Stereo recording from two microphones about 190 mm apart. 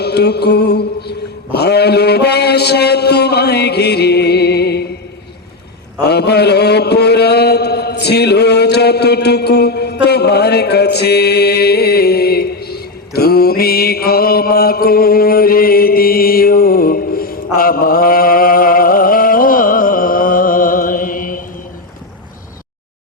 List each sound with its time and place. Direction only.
0.0 s music: 60° left (ahead or behind)
1.5 s a sound: 60° left (ahead or behind)
6.1 s chant: 60° left (ahead or behind)